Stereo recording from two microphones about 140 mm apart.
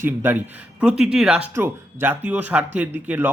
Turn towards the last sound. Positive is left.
turn(degrees=-10)  # may be behind; listen again after turning